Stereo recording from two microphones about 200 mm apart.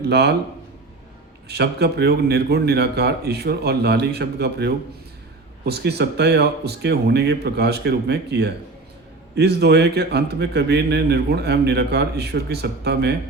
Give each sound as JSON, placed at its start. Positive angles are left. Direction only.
{"t": 0.0, "sound": "a man's voice", "side_deg": -55}
{"t": 1.5, "sound": "a man's voice", "side_deg": -55}